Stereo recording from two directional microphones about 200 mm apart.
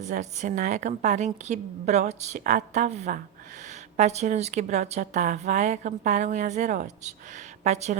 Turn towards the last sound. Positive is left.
turn(degrees=-35)  # may be behind; listen again after turning